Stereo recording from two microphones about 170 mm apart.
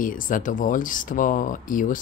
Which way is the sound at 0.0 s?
55° left (ahead or behind).